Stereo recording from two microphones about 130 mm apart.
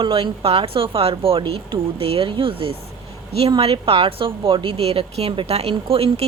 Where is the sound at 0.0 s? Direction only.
45° right (ahead or behind).